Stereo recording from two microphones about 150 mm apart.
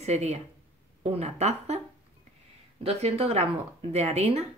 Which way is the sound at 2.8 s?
45° right (ahead or behind).